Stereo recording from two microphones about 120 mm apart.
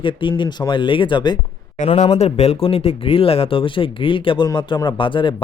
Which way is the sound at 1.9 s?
60° left (ahead or behind).